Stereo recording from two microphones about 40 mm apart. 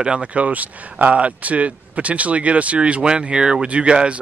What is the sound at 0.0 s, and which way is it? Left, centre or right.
A man's voice, right.